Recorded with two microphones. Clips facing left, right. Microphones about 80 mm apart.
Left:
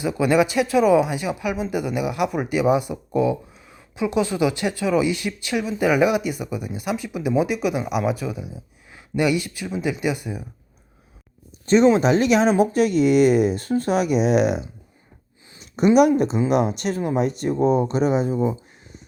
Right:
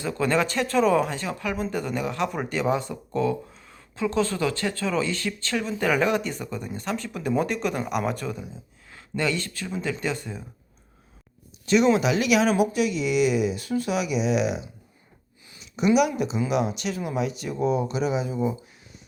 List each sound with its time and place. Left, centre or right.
0.0 s speech: centre
11.6 s speech: left
15.5 s a sound: left
15.9 s speech: left